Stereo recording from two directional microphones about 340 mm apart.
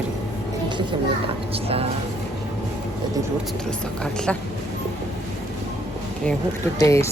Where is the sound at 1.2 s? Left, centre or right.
Centre.